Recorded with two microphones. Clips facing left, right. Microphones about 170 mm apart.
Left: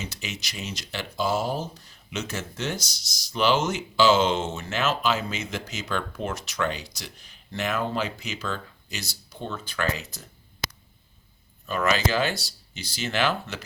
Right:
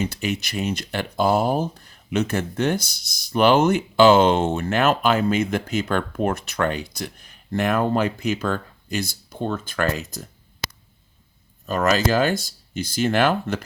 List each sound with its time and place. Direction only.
0.0 s speech: 55° right (ahead or behind)
11.6 s speech: 45° right (ahead or behind)